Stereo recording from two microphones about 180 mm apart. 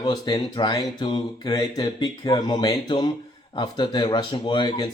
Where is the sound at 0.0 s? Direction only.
20° left (ahead or behind).